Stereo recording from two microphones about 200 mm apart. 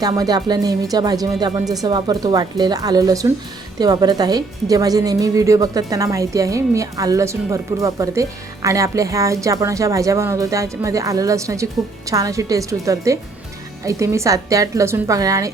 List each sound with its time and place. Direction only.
0.0 s a woman's voice: 20° right (ahead or behind)